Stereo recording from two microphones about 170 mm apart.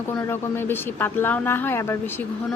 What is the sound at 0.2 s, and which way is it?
A woman's voice, 15° left (ahead or behind).